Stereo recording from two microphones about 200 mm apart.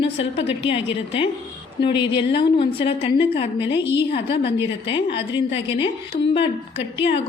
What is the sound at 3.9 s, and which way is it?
A woman's voice, 60° left (ahead or behind).